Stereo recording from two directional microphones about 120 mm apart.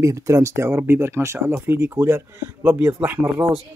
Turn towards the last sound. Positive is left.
turn(degrees=-20)  # may be behind; listen again after turning